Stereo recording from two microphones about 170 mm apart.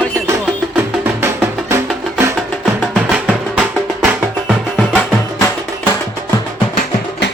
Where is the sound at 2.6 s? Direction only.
Centre (ahead or behind).